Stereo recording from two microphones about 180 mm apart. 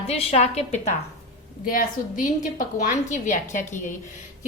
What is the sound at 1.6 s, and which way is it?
A woman's voice, 50° left (ahead or behind).